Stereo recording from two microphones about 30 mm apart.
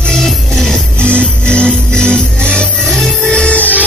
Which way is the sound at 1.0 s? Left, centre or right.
Left.